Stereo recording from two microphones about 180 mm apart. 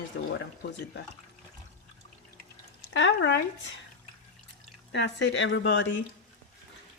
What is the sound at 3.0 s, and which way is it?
Speech, 80° left.